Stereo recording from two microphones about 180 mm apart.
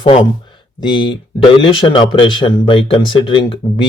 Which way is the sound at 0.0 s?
30° left (ahead or behind).